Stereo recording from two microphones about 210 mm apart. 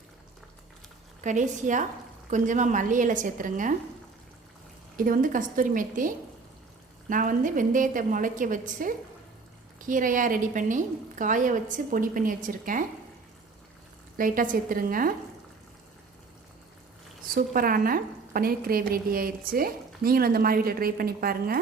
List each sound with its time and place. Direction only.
1.2 s a woman's voice: 35° right (ahead or behind)
4.9 s a woman's voice: 40° right (ahead or behind)
14.2 s a woman's voice: 40° right (ahead or behind)
17.3 s a woman's voice: 45° right (ahead or behind)